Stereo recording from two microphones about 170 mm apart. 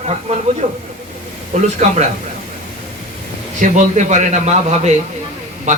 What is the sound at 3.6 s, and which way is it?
A man's voice, 45° right (ahead or behind).